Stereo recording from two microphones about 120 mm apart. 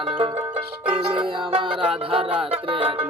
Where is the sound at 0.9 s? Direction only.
45° right (ahead or behind).